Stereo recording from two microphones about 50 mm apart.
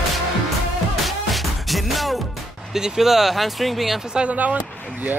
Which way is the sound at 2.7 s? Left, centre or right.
Centre.